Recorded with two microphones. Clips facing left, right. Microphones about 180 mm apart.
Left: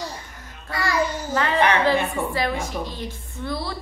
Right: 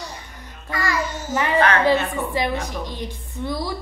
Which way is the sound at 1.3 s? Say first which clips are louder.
Right 4 dB; 15° right (ahead or behind).